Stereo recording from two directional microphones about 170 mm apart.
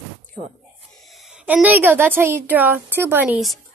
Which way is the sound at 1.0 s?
Centre (ahead or behind).